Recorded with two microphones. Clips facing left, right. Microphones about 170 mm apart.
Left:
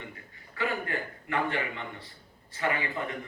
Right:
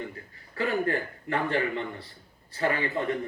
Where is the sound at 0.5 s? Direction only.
40° right (ahead or behind).